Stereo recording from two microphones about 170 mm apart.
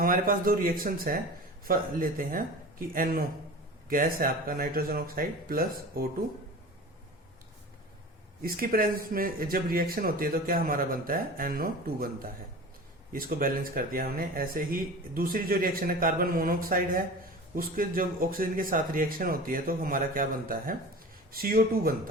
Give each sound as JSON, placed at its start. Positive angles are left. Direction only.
{"t": 0.0, "sound": "speech", "side_deg": -55}
{"t": 8.4, "sound": "speech", "side_deg": -60}